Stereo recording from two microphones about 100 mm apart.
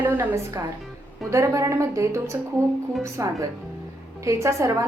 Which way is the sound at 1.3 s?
30° right (ahead or behind).